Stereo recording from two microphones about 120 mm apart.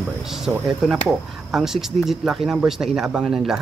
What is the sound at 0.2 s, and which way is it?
Speech, 5° right (ahead or behind).